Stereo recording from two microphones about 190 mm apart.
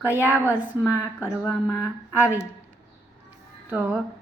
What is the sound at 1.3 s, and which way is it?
Speech, centre (ahead or behind).